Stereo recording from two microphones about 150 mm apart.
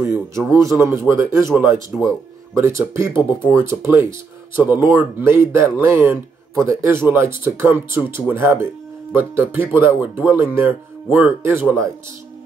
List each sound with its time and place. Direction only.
0.0 s speech: 15° right (ahead or behind)
2.5 s speech: 20° right (ahead or behind)